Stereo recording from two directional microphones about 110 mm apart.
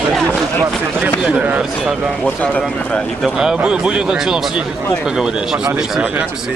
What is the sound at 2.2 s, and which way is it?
Speech, 10° left (ahead or behind).